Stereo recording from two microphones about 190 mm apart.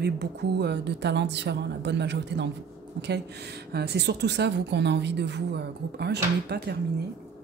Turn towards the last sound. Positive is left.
turn(degrees=-60)  # may be behind; listen again after turning